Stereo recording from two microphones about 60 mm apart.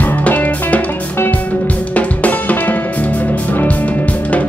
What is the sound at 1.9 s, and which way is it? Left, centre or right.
Music, left.